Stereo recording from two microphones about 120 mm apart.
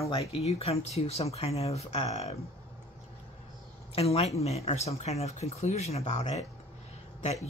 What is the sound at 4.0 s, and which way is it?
Speech, 60° left (ahead or behind).